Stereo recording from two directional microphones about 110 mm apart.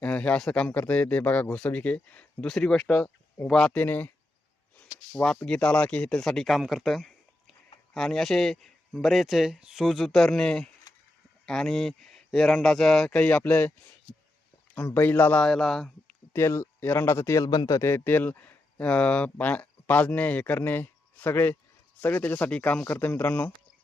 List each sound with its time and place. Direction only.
0.0 s a man's voice: 10° left (ahead or behind)
4.8 s a sound: 10° left (ahead or behind)
5.5 s speech: 10° left (ahead or behind)
14.8 s a man's voice: 15° left (ahead or behind)
16.3 s a man's voice: 25° left (ahead or behind)